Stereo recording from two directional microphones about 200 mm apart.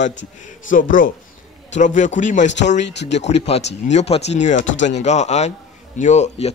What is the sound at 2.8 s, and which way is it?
Speech, 60° left (ahead or behind).